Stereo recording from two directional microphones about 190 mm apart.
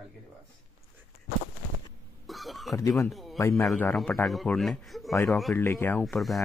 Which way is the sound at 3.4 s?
15° left (ahead or behind).